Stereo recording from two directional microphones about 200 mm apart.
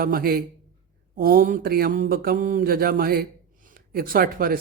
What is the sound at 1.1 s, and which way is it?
Mantra, 45° right (ahead or behind).